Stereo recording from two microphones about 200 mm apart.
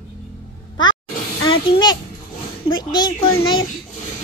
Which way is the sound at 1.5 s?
20° left (ahead or behind).